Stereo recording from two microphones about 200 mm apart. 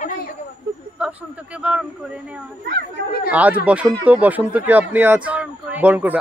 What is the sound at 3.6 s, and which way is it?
Speech, 5° right (ahead or behind).